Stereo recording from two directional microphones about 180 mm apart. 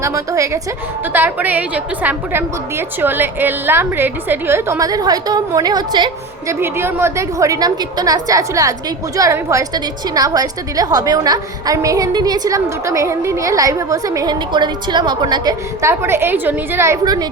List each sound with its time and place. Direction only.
0.0 s a woman's voice: 15° right (ahead or behind)